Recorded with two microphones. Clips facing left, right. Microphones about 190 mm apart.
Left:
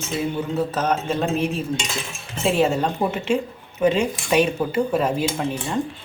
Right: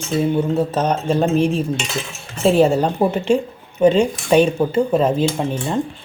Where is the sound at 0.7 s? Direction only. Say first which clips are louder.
Right 4 dB; 30° right (ahead or behind).